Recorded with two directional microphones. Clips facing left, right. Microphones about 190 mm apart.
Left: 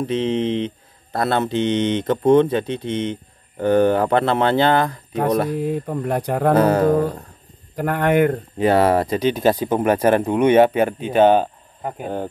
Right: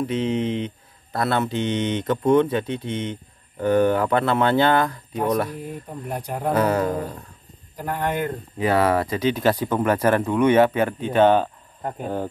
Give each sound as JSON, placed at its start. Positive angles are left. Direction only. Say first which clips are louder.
{"t": 0.0, "sound": "speech", "louder": "left 3 dB", "side_deg": 25}
{"t": 5.5, "sound": "speech", "louder": "left 10 dB", "side_deg": 70}
{"t": 6.5, "sound": "a sound", "louder": "left 4 dB", "side_deg": 35}
{"t": 6.9, "sound": "a sound", "louder": "left 9 dB", "side_deg": 65}
{"t": 7.7, "sound": "speech", "louder": "left 8 dB", "side_deg": 70}
{"t": 8.5, "sound": "speech", "louder": "left 3 dB", "side_deg": 30}